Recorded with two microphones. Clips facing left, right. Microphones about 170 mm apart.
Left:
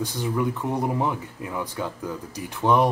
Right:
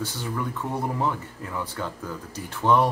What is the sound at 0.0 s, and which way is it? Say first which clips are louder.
Speech: left 5 dB; 15° left (ahead or behind).